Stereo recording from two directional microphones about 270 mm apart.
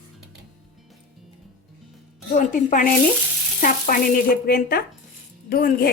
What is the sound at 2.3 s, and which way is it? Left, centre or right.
A woman's voice, left.